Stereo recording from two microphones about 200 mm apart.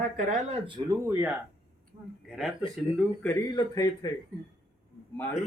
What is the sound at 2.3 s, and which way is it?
A man's voice, centre (ahead or behind).